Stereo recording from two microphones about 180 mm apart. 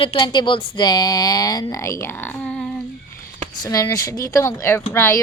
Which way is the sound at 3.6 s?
20° left (ahead or behind).